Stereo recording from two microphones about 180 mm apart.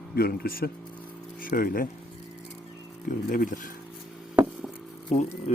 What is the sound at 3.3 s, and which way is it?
Speech, 50° left (ahead or behind).